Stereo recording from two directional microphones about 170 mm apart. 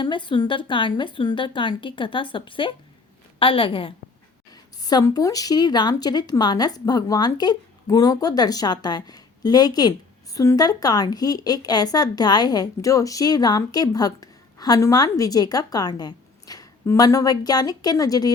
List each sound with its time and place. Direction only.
0.0 s a woman's voice: 30° left (ahead or behind)